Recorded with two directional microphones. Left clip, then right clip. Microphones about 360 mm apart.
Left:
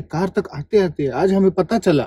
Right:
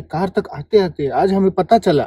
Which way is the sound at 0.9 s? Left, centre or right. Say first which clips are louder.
Right 2 dB; right.